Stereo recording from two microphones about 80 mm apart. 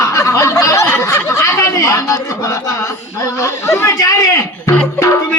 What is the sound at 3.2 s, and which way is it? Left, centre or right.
Chatter, left.